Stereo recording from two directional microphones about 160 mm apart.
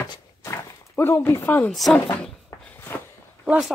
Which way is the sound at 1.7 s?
Centre (ahead or behind).